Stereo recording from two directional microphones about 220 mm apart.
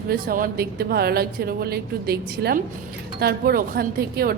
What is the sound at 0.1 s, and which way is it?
A woman's voice, 40° right (ahead or behind).